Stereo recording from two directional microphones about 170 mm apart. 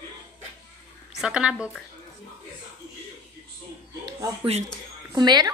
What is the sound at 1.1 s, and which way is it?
Speech, 5° right (ahead or behind).